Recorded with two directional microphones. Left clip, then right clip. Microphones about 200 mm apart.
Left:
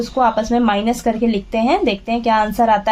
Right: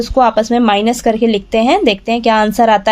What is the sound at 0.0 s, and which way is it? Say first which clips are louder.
Speech: right 5 dB; 45° right (ahead or behind).